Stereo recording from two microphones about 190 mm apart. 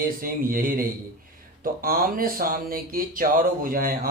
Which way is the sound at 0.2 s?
50° right (ahead or behind).